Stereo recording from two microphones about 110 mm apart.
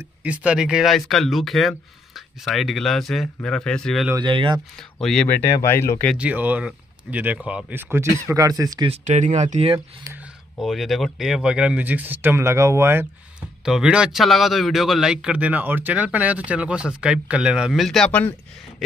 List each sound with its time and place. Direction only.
0.2 s speech: 10° right (ahead or behind)
4.2 s speech: 45° right (ahead or behind)
5.0 s speech: 5° left (ahead or behind)
5.3 s speech: 20° left (ahead or behind)
6.1 s a man's voice: 15° right (ahead or behind)
7.9 s speech: 25° right (ahead or behind)
8.8 s speech: 80° right
10.6 s a man's voice: centre (ahead or behind); by 13.0 s 25° right (ahead or behind)
13.7 s a man's voice: 5° right (ahead or behind); by 18.3 s 10° left (ahead or behind)